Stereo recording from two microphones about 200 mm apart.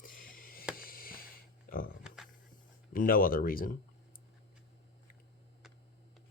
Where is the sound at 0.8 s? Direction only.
45° left (ahead or behind).